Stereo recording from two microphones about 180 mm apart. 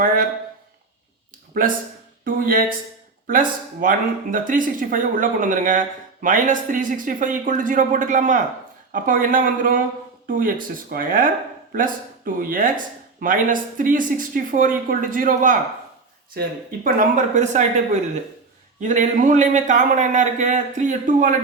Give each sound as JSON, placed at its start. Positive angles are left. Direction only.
{"t": 3.2, "sound": "speech", "side_deg": -50}
{"t": 16.8, "sound": "speech", "side_deg": -40}